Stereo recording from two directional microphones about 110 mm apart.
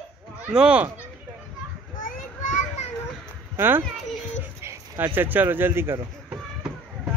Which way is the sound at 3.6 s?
20° right (ahead or behind).